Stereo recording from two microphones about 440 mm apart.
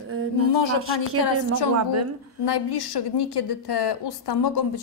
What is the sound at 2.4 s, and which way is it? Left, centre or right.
A woman's voice, left.